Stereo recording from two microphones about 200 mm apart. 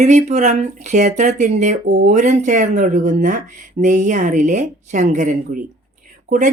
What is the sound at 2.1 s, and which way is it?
Speech, 35° right (ahead or behind).